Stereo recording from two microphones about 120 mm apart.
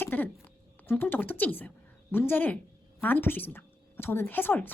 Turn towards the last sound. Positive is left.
turn(degrees=15)  # may be behind; listen again after turning